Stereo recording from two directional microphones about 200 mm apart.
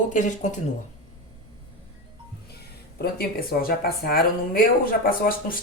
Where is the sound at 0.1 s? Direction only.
40° left (ahead or behind).